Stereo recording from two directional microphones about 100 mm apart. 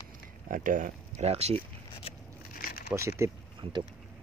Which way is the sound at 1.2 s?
90° right.